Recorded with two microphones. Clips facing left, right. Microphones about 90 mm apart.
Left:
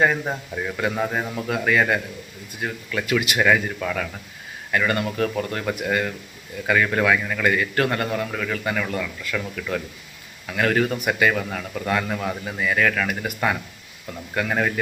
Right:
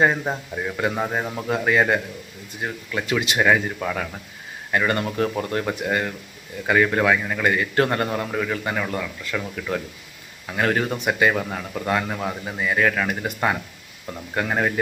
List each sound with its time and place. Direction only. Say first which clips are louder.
0.3 s a man's voice: right 1 dB; 10° right (ahead or behind)
1.5 s a man's voice: right 1 dB; 25° right (ahead or behind)